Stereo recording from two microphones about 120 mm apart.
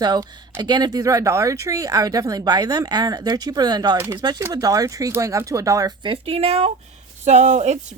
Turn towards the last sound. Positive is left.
turn(degrees=-70)  # may be behind; listen again after turning